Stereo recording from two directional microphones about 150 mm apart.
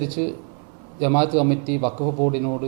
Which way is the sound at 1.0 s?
10° right (ahead or behind).